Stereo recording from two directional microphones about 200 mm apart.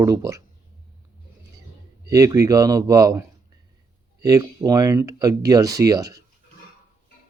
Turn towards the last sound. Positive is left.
turn(degrees=-15)  # may be behind; listen again after turning